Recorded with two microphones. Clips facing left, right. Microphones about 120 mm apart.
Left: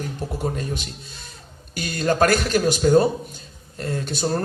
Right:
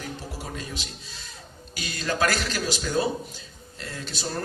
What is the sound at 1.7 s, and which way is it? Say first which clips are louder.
A man's voice: left 8 dB; 50° left (ahead or behind).